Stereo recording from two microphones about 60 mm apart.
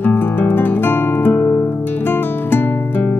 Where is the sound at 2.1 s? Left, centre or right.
Left.